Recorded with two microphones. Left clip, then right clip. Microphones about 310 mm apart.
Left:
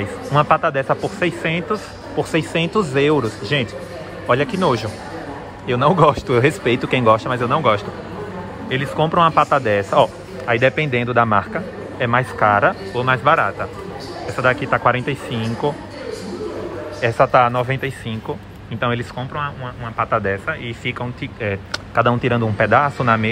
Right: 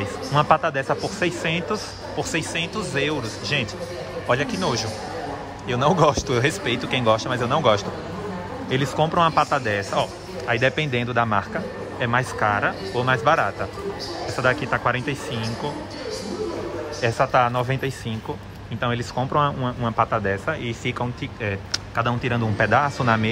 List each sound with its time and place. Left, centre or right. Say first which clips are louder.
0.0 s a man's voice: left 4 dB; centre
17.0 s a man's voice: left 5 dB; centre
20.1 s a man's voice: left 4 dB; centre